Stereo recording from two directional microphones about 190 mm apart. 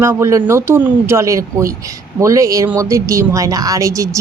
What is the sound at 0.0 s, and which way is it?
Speech, 15° right (ahead or behind).